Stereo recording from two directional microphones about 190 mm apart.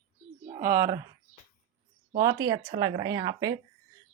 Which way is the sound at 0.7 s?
15° right (ahead or behind).